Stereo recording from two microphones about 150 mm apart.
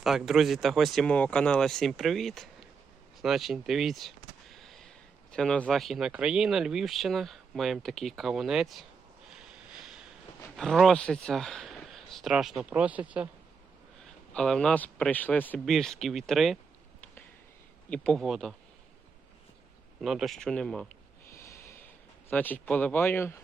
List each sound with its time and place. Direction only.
0.0 s speech: centre (ahead or behind)
4.5 s a sound: centre (ahead or behind)
5.3 s speech: 5° left (ahead or behind)
10.6 s speech: centre (ahead or behind)
14.0 s speech: 5° left (ahead or behind)
17.8 s speech: 5° left (ahead or behind)
20.0 s speech: centre (ahead or behind)
21.2 s snort: 20° left (ahead or behind)
22.3 s speech: 10° left (ahead or behind)